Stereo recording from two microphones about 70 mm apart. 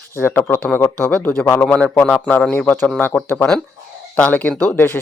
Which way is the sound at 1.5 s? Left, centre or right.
Centre.